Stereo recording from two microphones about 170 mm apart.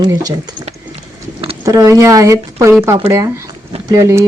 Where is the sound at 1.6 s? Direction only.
20° right (ahead or behind).